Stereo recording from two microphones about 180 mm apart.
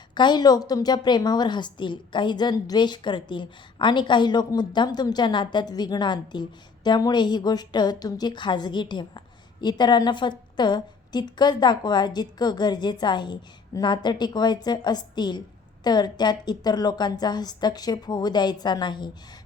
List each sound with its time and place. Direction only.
0.1 s a woman's voice: 25° left (ahead or behind)